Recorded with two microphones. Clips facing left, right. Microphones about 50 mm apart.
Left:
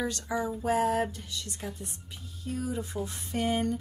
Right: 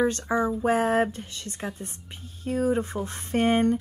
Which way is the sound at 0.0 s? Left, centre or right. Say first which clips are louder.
Right 7 dB; right.